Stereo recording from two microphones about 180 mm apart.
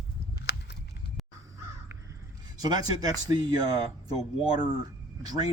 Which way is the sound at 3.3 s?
25° right (ahead or behind).